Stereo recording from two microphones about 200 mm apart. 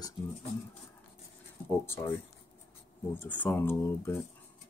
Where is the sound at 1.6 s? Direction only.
10° left (ahead or behind).